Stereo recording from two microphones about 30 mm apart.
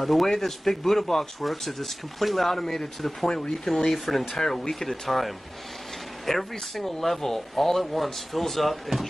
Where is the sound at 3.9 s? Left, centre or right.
Centre.